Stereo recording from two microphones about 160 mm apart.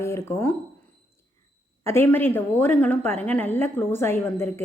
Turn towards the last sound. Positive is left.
turn(degrees=15)  # may be behind; listen again after turning